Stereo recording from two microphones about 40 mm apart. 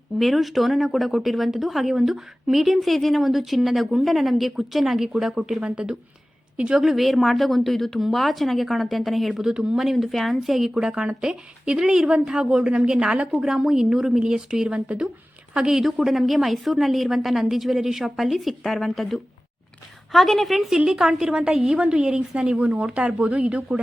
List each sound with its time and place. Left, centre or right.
0.2 s a woman's voice: centre
5.6 s a woman's voice: right
6.7 s speech: centre
9.4 s a woman's voice: right
9.7 s speech: centre
10.8 s a woman's voice: right
22.5 s a woman's voice: right